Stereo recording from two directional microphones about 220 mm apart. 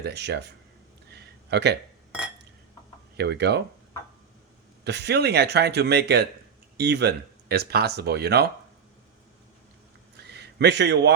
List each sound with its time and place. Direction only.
0.0 s speech: 50° right (ahead or behind)
1.1 s a sound: 50° right (ahead or behind)
3.2 s speech: 50° right (ahead or behind)
4.8 s speech: 50° right (ahead or behind)
10.3 s a man's voice: 50° right (ahead or behind)